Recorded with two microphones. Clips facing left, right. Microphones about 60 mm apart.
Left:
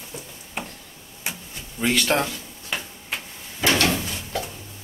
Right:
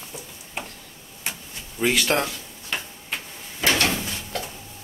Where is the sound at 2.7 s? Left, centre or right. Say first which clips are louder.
Even; centre.